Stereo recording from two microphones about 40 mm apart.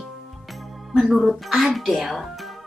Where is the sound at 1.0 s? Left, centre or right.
Centre.